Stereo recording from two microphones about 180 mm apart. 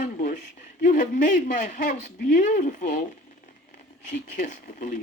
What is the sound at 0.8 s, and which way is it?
Speech, 45° left (ahead or behind).